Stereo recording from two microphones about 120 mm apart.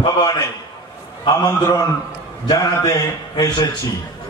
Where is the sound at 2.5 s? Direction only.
30° left (ahead or behind).